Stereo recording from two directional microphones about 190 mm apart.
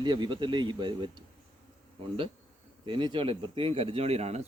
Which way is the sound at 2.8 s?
25° right (ahead or behind).